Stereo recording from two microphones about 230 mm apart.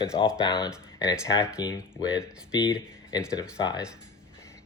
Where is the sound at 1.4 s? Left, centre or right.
Centre.